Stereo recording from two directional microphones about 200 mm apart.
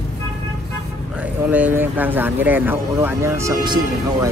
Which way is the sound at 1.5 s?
10° right (ahead or behind).